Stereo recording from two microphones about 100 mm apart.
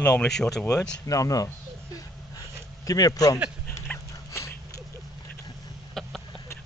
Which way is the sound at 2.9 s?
35° left (ahead or behind).